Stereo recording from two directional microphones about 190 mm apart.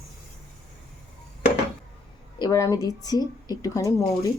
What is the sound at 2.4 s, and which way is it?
Speech, 15° left (ahead or behind).